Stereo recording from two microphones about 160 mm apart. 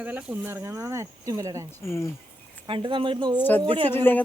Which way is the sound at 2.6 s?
30° right (ahead or behind).